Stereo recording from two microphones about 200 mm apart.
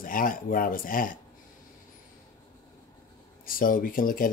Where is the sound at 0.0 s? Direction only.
45° left (ahead or behind).